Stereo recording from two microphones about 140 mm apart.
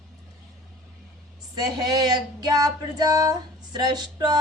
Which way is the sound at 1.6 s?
30° right (ahead or behind).